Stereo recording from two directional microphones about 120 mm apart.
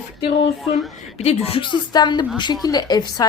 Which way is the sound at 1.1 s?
55° left (ahead or behind).